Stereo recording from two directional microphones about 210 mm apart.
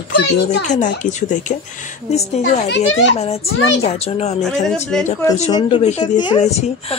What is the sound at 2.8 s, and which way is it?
Speech, 75° left (ahead or behind).